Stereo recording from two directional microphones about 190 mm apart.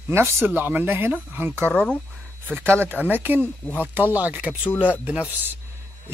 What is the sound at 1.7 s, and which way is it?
Speech, 5° left (ahead or behind).